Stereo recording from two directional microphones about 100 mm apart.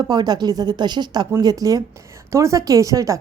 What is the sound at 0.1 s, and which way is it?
A woman's voice, 45° right (ahead or behind).